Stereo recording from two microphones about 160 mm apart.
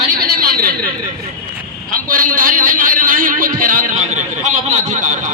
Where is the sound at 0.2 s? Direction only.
65° right (ahead or behind).